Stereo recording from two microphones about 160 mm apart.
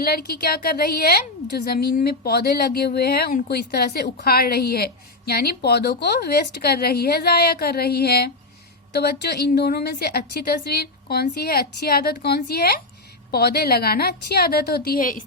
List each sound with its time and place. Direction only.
0.0 s a woman's voice: 70° left (ahead or behind)
14.8 s a woman's voice: 60° left (ahead or behind)